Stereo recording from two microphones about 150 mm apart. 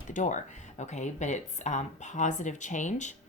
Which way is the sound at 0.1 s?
55° left (ahead or behind).